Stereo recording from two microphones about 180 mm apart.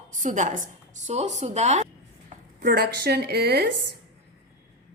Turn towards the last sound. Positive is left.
turn(degrees=-65)  # may be behind; listen again after turning